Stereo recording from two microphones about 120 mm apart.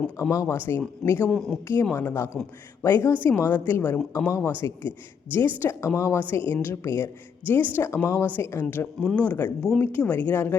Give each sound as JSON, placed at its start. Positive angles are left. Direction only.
{"t": 0.2, "sound": "speech", "side_deg": 25}
{"t": 1.3, "sound": "speech", "side_deg": 0}
{"t": 1.6, "sound": "speech", "side_deg": 20}
{"t": 4.3, "sound": "speech", "side_deg": 25}
{"t": 9.0, "sound": "speech", "side_deg": 10}